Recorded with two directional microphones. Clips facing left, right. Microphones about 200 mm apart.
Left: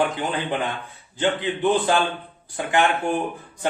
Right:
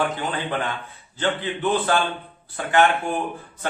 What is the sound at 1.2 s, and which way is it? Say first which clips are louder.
A man's voice: left 2 dB; 15° left (ahead or behind).